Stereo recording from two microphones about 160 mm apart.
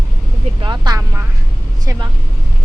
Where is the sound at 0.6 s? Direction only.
25° right (ahead or behind).